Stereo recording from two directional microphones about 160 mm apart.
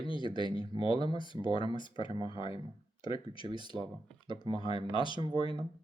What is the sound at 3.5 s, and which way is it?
Speech, 30° right (ahead or behind).